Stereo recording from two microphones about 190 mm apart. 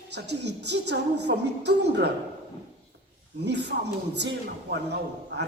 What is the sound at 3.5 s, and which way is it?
A man's voice, 65° right (ahead or behind).